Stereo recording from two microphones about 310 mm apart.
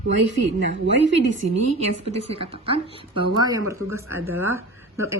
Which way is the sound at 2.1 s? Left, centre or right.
Centre.